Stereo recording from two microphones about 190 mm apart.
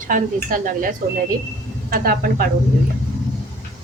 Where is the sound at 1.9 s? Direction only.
50° right (ahead or behind).